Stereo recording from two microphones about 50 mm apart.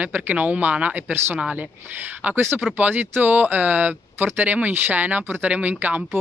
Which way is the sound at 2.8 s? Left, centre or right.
Right.